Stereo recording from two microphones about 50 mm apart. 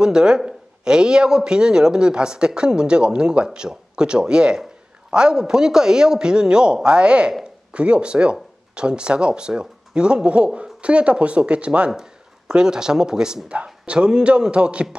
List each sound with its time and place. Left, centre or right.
0.0 s speech: centre